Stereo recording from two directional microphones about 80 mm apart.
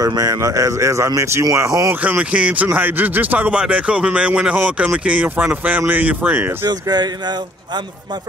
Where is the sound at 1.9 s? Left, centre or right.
Right.